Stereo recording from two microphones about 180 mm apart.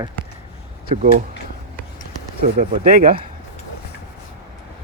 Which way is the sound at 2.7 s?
50° right (ahead or behind).